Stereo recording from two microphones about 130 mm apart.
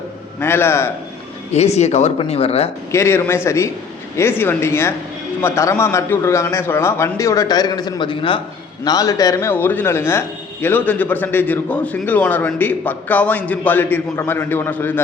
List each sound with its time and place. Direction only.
0.3 s a man's voice: 15° left (ahead or behind)
1.5 s speech: 55° left (ahead or behind)
2.9 s a man's voice: 20° left (ahead or behind); by 8.4 s 40° left (ahead or behind)
8.8 s a man's voice: 30° left (ahead or behind)